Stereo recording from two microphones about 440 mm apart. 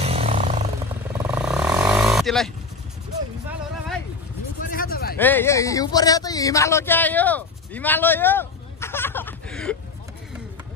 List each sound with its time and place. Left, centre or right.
0.0 s music: centre
1.1 s vehicle: centre
4.6 s a sound: centre
5.1 s speech: centre